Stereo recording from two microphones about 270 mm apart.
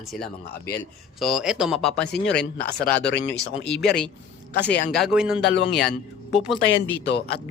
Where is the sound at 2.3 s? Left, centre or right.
Left.